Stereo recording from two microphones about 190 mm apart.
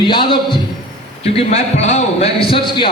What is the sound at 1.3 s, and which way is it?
A man's voice, 35° left (ahead or behind).